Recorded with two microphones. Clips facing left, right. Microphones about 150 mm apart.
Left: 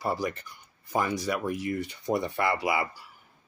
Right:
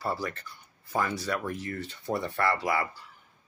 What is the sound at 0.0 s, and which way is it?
Speech, 15° left (ahead or behind).